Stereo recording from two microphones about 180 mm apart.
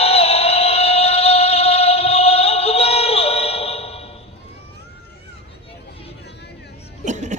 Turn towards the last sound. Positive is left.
turn(degrees=-40)  # may be behind; listen again after turning